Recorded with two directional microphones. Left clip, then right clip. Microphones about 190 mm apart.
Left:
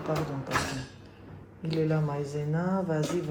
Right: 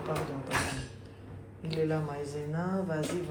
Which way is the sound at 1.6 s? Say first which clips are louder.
Left 2 dB; 35° left (ahead or behind).